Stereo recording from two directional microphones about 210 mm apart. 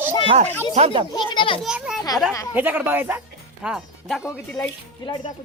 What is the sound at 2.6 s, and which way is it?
Speech, 10° right (ahead or behind).